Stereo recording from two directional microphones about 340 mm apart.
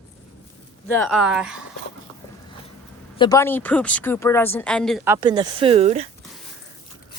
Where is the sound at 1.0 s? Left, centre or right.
Centre.